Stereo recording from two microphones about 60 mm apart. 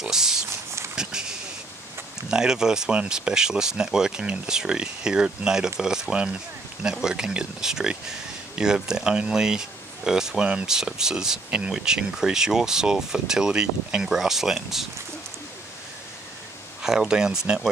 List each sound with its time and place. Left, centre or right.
0.0 s speech: centre
0.5 s a sound: right
2.2 s speech: centre
16.8 s speech: centre